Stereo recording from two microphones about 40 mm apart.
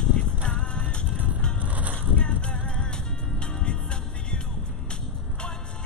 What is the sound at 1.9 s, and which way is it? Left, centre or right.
Vehicle, left.